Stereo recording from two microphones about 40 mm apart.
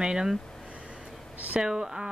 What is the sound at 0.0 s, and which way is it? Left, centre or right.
Speech, centre.